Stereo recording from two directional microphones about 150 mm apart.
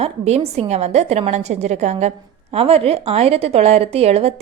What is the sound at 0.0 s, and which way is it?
A woman's voice, 45° right (ahead or behind).